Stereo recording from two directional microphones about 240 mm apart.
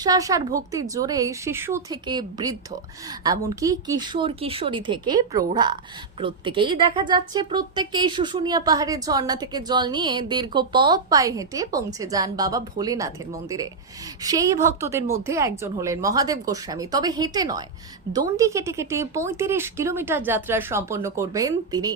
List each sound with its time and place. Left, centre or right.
0.0 s a woman's voice: centre